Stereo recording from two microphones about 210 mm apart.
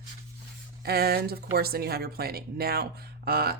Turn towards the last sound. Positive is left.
turn(degrees=-45)  # may be behind; listen again after turning